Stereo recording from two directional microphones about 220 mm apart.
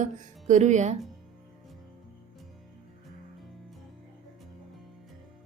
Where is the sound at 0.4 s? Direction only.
35° right (ahead or behind).